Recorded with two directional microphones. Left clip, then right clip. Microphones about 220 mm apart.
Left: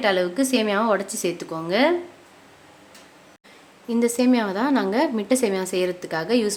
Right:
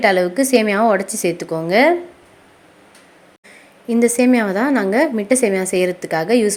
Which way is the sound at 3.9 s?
20° right (ahead or behind).